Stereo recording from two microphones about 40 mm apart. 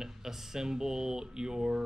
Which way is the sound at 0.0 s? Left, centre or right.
Centre.